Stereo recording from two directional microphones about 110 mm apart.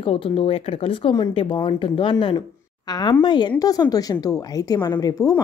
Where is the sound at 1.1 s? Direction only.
45° left (ahead or behind).